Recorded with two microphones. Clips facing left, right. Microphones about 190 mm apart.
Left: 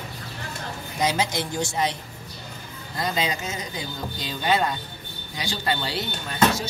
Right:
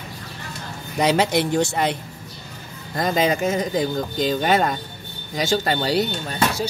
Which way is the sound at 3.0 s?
50° right (ahead or behind).